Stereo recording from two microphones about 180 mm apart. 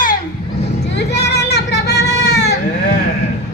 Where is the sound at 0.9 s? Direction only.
70° left (ahead or behind).